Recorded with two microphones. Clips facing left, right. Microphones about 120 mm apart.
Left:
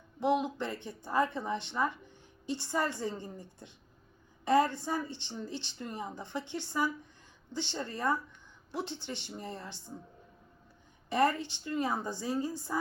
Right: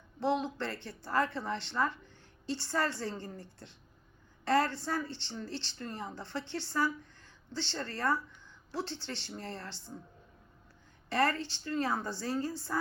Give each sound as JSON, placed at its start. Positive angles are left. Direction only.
{"t": 0.2, "sound": "speech", "side_deg": 15}
{"t": 11.1, "sound": "speech", "side_deg": 15}